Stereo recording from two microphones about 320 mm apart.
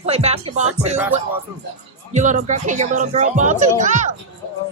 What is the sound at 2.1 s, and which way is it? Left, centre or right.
Speech, right.